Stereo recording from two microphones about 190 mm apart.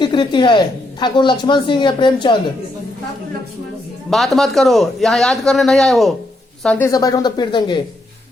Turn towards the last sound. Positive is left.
turn(degrees=25)  # may be behind; listen again after turning